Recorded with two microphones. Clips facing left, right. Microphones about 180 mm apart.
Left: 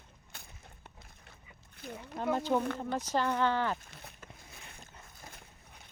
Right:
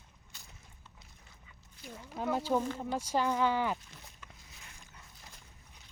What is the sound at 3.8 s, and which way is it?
Boat, 55° left (ahead or behind).